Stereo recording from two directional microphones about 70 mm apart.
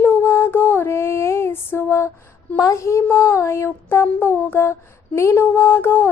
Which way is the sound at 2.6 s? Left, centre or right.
Left.